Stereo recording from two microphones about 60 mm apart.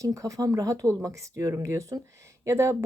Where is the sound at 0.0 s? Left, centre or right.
Right.